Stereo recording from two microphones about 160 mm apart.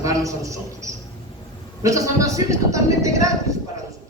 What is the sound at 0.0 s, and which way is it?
A man's voice, 20° right (ahead or behind).